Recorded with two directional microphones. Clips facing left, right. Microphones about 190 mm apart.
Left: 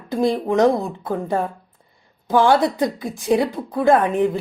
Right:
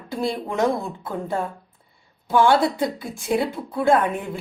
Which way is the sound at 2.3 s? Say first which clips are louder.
Left 2 dB; 15° left (ahead or behind).